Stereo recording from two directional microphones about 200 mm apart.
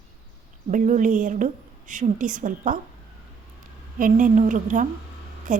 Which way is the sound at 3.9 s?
40° right (ahead or behind).